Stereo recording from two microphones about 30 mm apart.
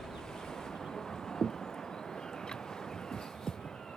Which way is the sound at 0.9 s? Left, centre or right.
Centre.